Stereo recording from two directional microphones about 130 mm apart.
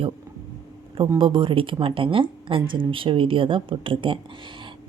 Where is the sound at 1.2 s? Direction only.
40° right (ahead or behind).